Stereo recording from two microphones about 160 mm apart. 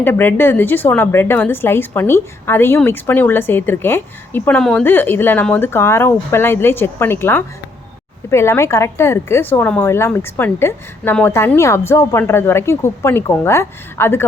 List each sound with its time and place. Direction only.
0.0 s speech: 15° left (ahead or behind)